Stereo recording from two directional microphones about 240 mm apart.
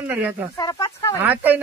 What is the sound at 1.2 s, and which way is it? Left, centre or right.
Speech, centre.